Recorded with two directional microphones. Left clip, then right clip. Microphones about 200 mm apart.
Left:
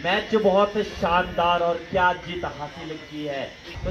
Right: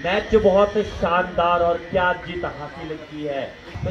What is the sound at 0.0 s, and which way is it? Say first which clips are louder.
Speech: right 3 dB; 25° left (ahead or behind).